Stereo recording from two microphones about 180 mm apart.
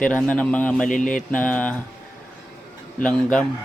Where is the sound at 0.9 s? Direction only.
45° left (ahead or behind).